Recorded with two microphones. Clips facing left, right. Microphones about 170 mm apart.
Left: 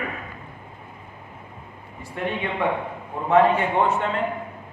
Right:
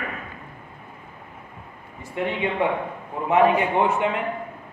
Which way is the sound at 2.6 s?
20° right (ahead or behind).